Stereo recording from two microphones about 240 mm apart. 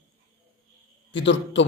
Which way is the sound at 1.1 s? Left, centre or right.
Left.